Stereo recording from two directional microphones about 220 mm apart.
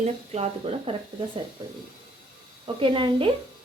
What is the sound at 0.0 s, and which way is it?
Speech, 30° right (ahead or behind).